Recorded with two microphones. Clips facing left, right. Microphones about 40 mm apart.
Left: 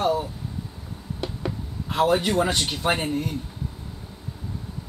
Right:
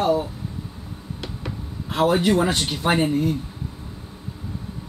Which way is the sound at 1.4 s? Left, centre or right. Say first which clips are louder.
Left 1 dB; centre.